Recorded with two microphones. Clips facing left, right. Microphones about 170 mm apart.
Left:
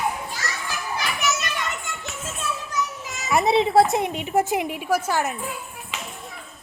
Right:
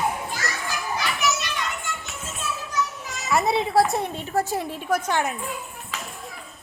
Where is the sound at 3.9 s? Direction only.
15° left (ahead or behind).